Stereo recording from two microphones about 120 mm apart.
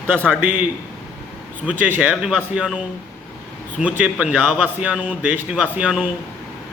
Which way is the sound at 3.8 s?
5° right (ahead or behind).